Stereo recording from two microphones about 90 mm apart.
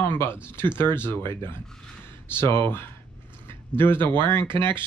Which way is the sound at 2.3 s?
25° left (ahead or behind).